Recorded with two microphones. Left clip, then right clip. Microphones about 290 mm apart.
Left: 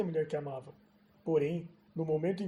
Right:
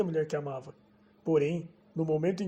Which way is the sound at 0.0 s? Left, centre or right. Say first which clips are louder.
Right 3 dB; right.